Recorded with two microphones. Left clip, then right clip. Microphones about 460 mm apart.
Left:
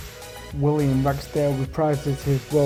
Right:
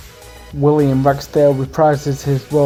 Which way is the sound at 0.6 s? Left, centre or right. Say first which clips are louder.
Right 9 dB; left.